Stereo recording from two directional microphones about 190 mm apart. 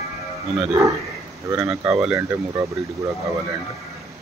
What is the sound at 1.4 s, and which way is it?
Speech, 15° right (ahead or behind).